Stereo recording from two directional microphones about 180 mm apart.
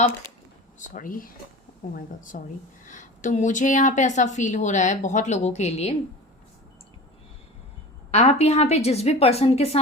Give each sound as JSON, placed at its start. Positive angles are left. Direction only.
{"t": 0.8, "sound": "a woman's voice", "side_deg": 50}
{"t": 8.1, "sound": "a woman's voice", "side_deg": 40}